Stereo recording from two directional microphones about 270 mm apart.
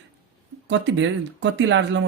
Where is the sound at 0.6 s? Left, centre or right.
Right.